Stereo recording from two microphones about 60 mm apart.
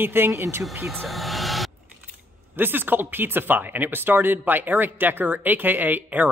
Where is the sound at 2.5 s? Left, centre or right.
Right.